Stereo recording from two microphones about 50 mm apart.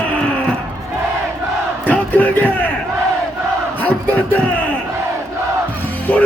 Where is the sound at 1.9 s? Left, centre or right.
Left.